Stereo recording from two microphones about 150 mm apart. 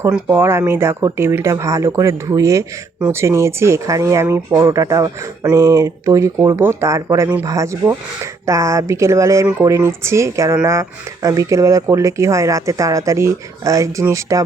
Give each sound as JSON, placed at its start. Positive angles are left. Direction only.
{"t": 0.0, "sound": "speech", "side_deg": -20}